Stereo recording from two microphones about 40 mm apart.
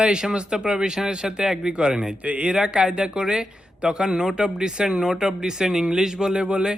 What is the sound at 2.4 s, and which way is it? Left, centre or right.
Speech, centre.